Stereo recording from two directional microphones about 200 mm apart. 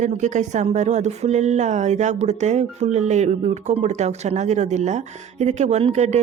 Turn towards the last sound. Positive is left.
turn(degrees=-35)  # may be behind; listen again after turning